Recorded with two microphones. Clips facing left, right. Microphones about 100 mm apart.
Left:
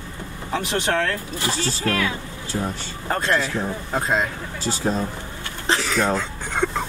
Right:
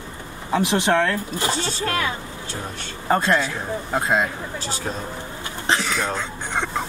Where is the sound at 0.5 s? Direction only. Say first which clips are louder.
Right 4 dB; 5° right (ahead or behind).